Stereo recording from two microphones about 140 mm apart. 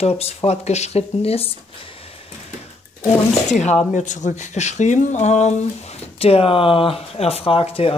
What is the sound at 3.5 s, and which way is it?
Speech, 55° left (ahead or behind).